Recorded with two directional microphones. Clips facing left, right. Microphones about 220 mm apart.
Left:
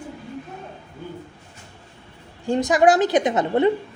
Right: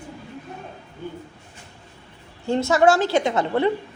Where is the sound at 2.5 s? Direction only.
15° left (ahead or behind).